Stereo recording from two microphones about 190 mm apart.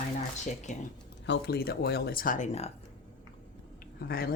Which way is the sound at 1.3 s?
55° left (ahead or behind).